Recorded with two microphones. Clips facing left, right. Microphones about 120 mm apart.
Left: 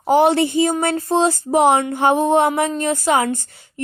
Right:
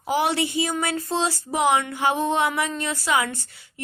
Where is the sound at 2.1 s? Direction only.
20° left (ahead or behind).